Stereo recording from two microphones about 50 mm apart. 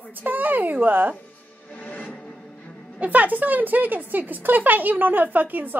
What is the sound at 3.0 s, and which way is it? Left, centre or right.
Speech, right.